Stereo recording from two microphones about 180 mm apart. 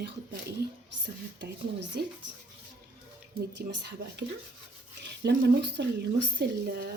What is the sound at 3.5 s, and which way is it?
Speech, 70° right (ahead or behind).